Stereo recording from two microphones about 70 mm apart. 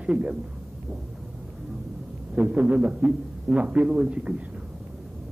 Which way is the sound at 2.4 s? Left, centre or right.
Centre.